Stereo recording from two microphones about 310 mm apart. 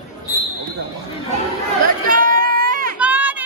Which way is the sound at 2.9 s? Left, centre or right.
Centre.